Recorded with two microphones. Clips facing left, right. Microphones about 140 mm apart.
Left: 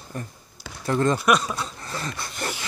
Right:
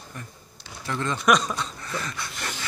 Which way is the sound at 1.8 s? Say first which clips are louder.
Even; 35° left (ahead or behind).